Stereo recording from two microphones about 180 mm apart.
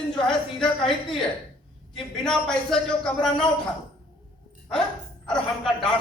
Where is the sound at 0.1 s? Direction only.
5° left (ahead or behind).